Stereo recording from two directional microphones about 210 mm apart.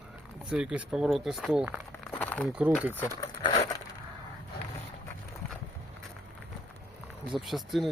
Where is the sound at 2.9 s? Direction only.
15° left (ahead or behind).